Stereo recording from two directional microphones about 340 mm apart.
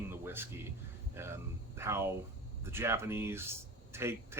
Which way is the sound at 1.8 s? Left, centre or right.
Centre.